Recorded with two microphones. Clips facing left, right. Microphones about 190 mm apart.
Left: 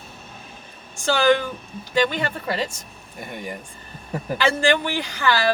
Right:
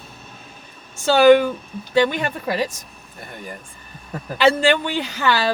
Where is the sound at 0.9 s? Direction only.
20° right (ahead or behind).